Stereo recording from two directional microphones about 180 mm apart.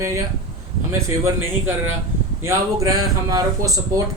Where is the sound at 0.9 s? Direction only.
15° right (ahead or behind).